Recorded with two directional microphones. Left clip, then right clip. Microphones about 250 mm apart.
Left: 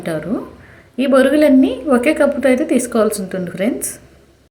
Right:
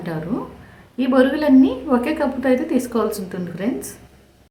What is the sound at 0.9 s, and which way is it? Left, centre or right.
A woman's voice, centre.